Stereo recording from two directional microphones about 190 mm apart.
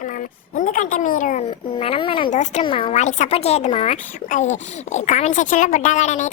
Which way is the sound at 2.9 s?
40° left (ahead or behind).